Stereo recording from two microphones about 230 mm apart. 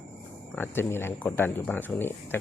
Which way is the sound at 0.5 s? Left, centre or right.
Centre.